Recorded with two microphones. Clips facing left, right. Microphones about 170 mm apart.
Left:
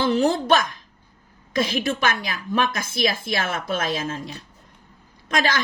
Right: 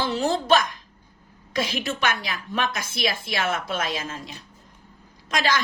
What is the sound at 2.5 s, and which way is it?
A woman's voice, 50° left (ahead or behind).